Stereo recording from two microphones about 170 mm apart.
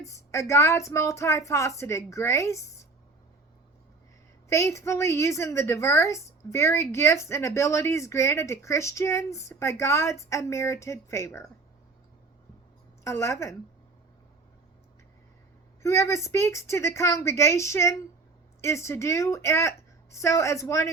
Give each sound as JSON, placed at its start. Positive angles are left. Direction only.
{"t": 0.0, "sound": "a woman's voice", "side_deg": 15}
{"t": 4.4, "sound": "a woman's voice", "side_deg": 15}
{"t": 13.1, "sound": "a woman's voice", "side_deg": 15}
{"t": 15.8, "sound": "a woman's voice", "side_deg": 15}